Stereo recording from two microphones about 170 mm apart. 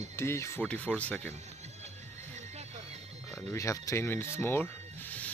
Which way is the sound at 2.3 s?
40° right (ahead or behind).